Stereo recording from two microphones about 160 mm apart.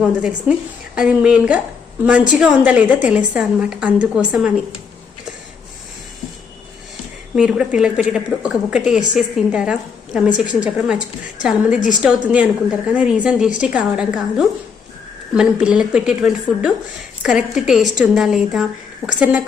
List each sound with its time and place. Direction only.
0.2 s a woman's voice: 5° right (ahead or behind)
7.3 s a woman's voice: 5° right (ahead or behind)
12.0 s a woman's voice: 10° right (ahead or behind)